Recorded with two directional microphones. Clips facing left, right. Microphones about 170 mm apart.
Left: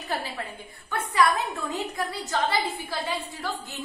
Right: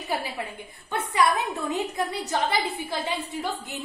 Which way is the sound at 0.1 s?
20° right (ahead or behind).